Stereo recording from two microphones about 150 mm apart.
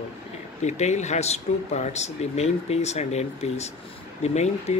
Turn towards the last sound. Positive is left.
turn(degrees=45)  # may be behind; listen again after turning